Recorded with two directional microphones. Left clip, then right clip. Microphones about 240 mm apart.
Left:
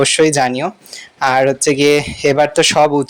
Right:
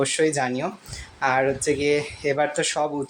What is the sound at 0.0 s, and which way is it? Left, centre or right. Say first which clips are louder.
A man's voice: left 10 dB; left.